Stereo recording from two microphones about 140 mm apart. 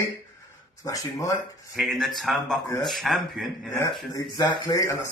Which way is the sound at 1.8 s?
Centre (ahead or behind).